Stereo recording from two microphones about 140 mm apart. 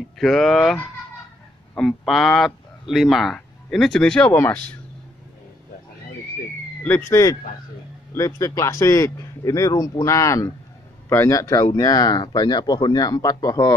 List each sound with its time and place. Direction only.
0.2 s speech: centre (ahead or behind)
6.8 s speech: 15° left (ahead or behind)